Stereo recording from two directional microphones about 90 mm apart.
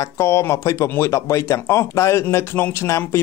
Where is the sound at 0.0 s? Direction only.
30° left (ahead or behind).